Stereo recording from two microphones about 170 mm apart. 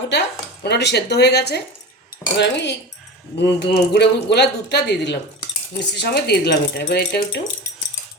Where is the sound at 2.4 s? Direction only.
90° left.